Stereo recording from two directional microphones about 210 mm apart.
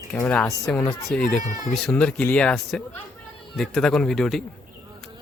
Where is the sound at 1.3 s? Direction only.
40° left (ahead or behind).